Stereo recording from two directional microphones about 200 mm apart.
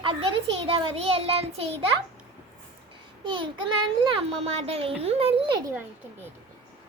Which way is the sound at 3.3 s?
25° right (ahead or behind).